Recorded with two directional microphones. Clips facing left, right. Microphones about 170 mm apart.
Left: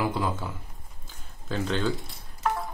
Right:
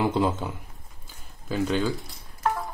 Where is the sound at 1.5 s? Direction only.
10° right (ahead or behind).